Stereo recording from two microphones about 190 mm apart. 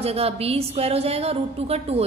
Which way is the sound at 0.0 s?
30° right (ahead or behind).